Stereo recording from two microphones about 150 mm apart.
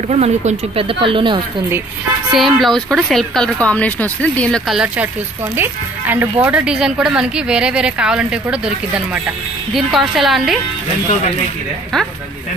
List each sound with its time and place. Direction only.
0.1 s speech: 45° right (ahead or behind)
2.3 s speech: centre (ahead or behind)
4.6 s speech: 5° right (ahead or behind)